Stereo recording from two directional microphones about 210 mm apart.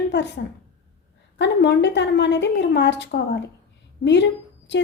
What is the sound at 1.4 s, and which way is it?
A woman's voice, 55° left (ahead or behind).